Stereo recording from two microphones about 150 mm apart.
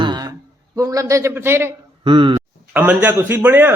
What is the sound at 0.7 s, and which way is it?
A man's voice, 20° right (ahead or behind).